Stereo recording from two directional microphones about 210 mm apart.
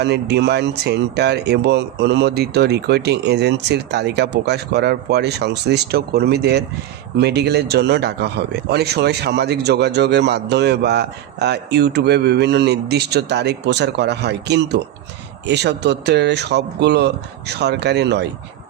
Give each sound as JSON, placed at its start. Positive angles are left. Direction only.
{"t": 0.0, "sound": "speech", "side_deg": -55}